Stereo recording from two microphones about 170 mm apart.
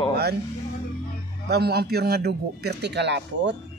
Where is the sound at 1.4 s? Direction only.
75° right (ahead or behind); by 3.6 s 90° right.